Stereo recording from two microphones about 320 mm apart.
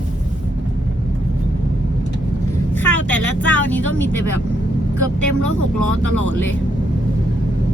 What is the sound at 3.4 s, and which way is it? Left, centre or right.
Vehicle, centre.